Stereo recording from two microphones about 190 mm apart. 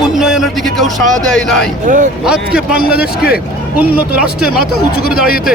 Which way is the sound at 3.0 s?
55° left (ahead or behind).